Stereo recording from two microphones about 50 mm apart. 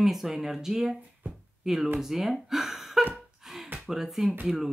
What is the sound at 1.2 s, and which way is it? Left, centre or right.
Speech, right.